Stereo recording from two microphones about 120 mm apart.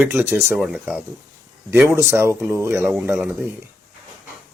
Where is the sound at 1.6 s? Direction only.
20° right (ahead or behind).